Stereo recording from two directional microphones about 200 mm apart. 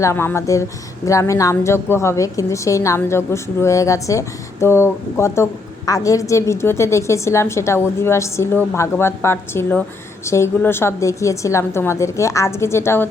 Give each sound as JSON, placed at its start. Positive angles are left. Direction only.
{"t": 0.0, "sound": "a woman's voice", "side_deg": 10}